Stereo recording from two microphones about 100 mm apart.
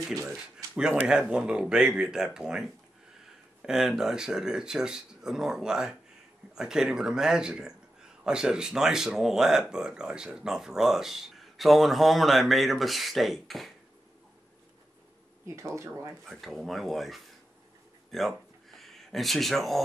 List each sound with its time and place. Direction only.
1.3 s speech: 10° right (ahead or behind)
15.4 s speech: 30° right (ahead or behind)
16.3 s speech: centre (ahead or behind)
18.1 s a sound: centre (ahead or behind)